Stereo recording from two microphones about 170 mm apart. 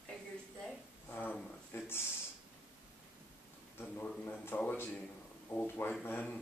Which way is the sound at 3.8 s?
10° left (ahead or behind).